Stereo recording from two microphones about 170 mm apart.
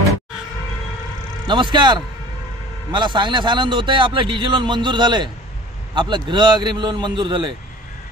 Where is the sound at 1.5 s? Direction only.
30° right (ahead or behind).